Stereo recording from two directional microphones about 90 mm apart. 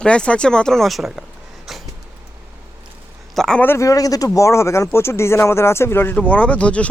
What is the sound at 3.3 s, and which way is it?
Speech, 5° left (ahead or behind).